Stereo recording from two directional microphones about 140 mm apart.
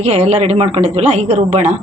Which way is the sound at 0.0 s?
55° right (ahead or behind).